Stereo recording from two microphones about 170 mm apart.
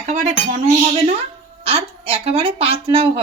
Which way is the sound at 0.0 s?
45° right (ahead or behind).